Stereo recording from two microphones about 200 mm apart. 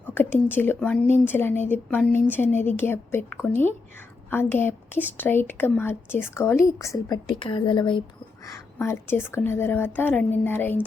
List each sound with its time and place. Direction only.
0.4 s a woman's voice: 10° left (ahead or behind)